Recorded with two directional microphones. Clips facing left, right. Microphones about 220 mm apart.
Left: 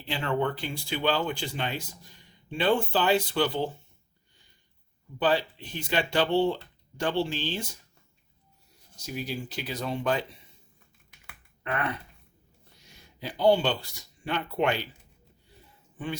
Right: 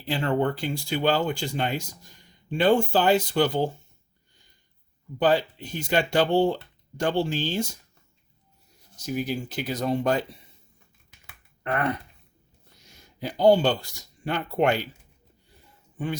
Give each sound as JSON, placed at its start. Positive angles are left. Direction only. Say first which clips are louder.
{"t": 0.1, "sound": "speech", "louder": "right 4 dB", "side_deg": -40}
{"t": 5.2, "sound": "speech", "louder": "right 4 dB", "side_deg": -45}
{"t": 9.0, "sound": "speech", "louder": "right 6 dB", "side_deg": -50}
{"t": 11.6, "sound": "speech", "louder": "right 4 dB", "side_deg": -45}
{"t": 13.1, "sound": "speech", "louder": "right 4 dB", "side_deg": -45}